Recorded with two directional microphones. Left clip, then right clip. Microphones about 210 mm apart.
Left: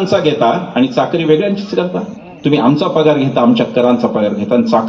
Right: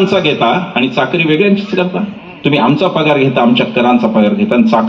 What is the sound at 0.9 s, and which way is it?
A man's voice, 60° left (ahead or behind).